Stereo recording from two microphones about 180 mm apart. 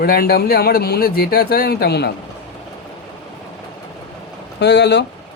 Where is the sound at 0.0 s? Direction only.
60° left (ahead or behind).